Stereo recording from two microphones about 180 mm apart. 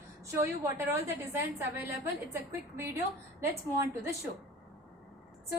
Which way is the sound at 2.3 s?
15° right (ahead or behind).